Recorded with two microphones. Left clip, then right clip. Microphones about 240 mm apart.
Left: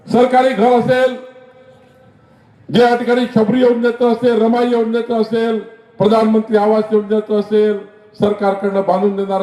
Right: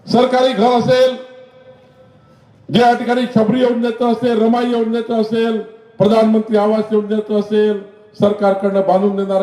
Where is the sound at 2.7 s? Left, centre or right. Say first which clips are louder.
Left 1 dB; right.